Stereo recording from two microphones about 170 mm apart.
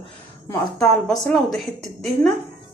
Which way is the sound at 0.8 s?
5° left (ahead or behind).